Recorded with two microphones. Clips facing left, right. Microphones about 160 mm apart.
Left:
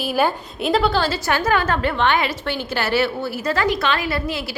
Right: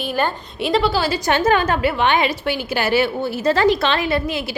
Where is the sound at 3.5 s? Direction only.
30° right (ahead or behind).